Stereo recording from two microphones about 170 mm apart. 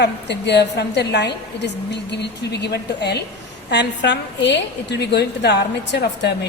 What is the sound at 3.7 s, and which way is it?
A woman's voice, 90° left.